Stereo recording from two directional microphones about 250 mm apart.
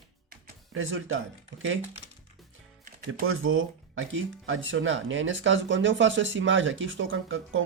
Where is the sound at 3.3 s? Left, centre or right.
Right.